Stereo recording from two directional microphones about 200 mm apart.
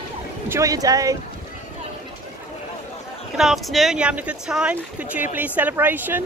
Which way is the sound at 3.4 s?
Centre (ahead or behind).